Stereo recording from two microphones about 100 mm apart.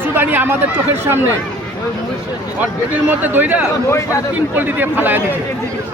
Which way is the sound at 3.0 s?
20° right (ahead or behind).